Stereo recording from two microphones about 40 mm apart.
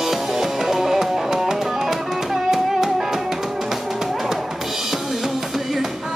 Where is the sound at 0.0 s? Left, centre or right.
Centre.